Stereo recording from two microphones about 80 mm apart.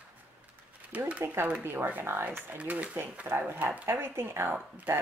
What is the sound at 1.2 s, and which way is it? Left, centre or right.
Speech, right.